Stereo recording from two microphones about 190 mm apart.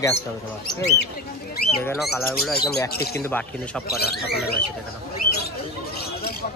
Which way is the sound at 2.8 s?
15° left (ahead or behind).